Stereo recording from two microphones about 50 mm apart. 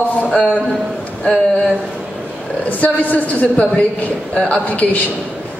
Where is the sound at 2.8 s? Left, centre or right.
Left.